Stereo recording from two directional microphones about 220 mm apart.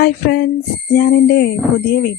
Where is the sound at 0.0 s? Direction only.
45° left (ahead or behind).